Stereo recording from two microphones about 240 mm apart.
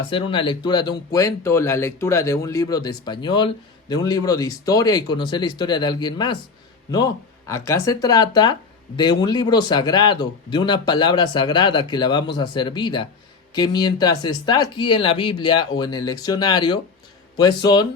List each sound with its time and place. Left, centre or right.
0.1 s speech: left